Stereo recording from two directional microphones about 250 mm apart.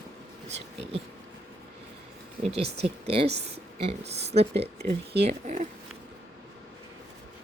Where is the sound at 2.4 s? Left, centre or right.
Right.